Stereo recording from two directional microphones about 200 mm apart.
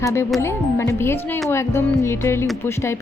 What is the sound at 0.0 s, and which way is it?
Speech, 15° left (ahead or behind).